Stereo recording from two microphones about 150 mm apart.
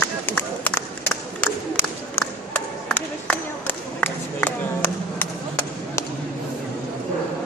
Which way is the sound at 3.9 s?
15° left (ahead or behind).